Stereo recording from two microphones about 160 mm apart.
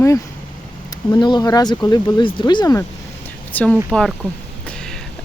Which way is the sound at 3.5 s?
5° left (ahead or behind).